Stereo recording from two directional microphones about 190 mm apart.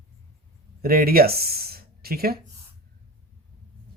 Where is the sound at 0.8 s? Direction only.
50° right (ahead or behind).